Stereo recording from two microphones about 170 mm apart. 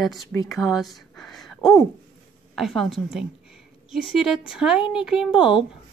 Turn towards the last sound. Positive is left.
turn(degrees=30)  # may be behind; listen again after turning